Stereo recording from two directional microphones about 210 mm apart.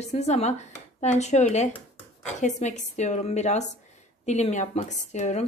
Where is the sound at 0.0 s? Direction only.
30° left (ahead or behind).